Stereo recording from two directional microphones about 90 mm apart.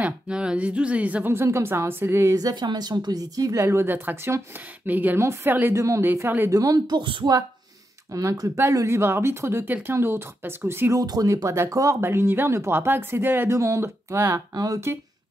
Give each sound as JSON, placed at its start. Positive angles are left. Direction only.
{"t": 0.0, "sound": "a woman's voice", "side_deg": -10}
{"t": 1.3, "sound": "speech", "side_deg": -30}
{"t": 2.3, "sound": "speech", "side_deg": -50}
{"t": 3.6, "sound": "speech", "side_deg": -25}
{"t": 6.5, "sound": "speech", "side_deg": -45}
{"t": 7.0, "sound": "speech", "side_deg": -65}
{"t": 8.1, "sound": "speech", "side_deg": -35}
{"t": 11.0, "sound": "speech", "side_deg": -45}
{"t": 12.0, "sound": "speech", "side_deg": -25}
{"t": 14.5, "sound": "speech", "side_deg": -45}